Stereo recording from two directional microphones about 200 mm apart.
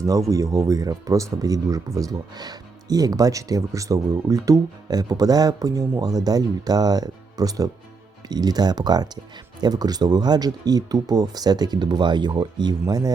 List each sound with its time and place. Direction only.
0.0 s speech: 15° right (ahead or behind)